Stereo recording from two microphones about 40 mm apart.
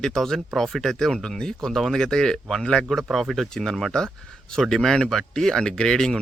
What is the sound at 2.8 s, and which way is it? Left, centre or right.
Speech, centre.